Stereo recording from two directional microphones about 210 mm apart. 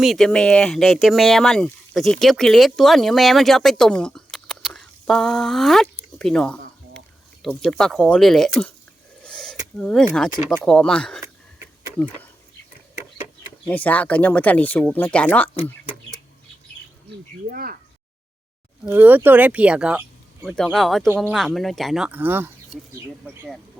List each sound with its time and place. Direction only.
0.0 s speech: centre (ahead or behind)
9.2 s a sound: 5° left (ahead or behind)
9.7 s speech: 5° left (ahead or behind)
13.7 s speech: 5° left (ahead or behind)
15.5 s speech: 25° left (ahead or behind)
17.5 s speech: 45° right (ahead or behind)
18.9 s speech: 10° right (ahead or behind)